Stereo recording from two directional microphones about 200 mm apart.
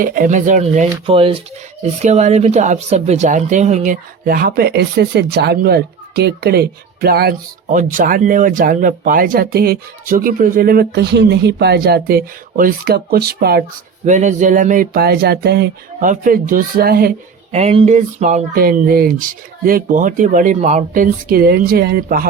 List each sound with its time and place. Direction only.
0.0 s speech: 45° right (ahead or behind)
14.0 s speech: 35° right (ahead or behind); by 16.0 s 55° right (ahead or behind)
16.0 s speech: 40° right (ahead or behind)
17.5 s speech: 30° right (ahead or behind); by 22.3 s 50° right (ahead or behind)